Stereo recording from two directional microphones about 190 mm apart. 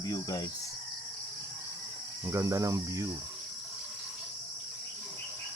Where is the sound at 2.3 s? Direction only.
15° right (ahead or behind).